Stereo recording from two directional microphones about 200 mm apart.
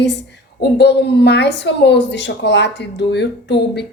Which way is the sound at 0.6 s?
55° left (ahead or behind).